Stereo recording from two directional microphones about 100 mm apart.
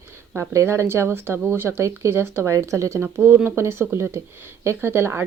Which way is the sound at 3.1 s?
20° right (ahead or behind).